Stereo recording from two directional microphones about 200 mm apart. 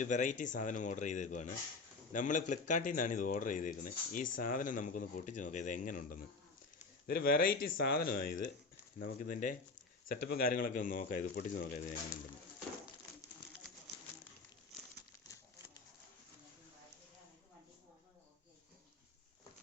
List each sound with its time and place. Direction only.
0.0 s speech: 40° left (ahead or behind)